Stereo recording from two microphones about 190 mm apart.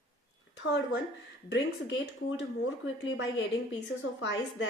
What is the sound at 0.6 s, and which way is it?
Speech, 65° left (ahead or behind).